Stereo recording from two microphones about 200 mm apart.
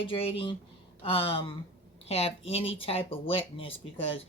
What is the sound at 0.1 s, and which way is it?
Speech, 25° left (ahead or behind).